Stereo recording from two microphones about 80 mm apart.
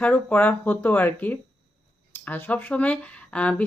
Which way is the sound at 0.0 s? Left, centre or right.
Centre.